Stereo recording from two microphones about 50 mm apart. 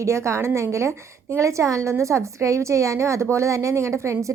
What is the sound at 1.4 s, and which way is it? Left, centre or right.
A woman's voice, right.